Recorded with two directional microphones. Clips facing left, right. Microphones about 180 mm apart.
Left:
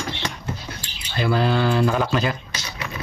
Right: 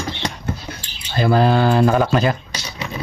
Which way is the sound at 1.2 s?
45° right (ahead or behind).